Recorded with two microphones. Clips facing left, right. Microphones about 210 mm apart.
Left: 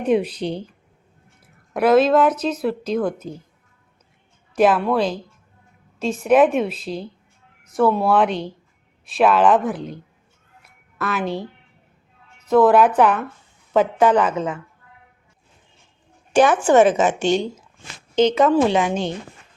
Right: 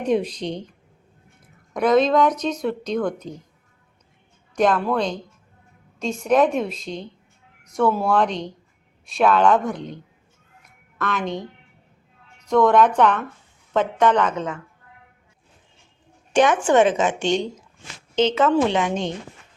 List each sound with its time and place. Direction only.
0.0 s a woman's voice: 5° left (ahead or behind)
4.5 s a woman's voice: 5° left (ahead or behind)
10.6 s a sound: 5° left (ahead or behind)
12.5 s a woman's voice: 5° left (ahead or behind)
16.4 s speech: 35° left (ahead or behind)
16.7 s a woman's voice: 5° left (ahead or behind)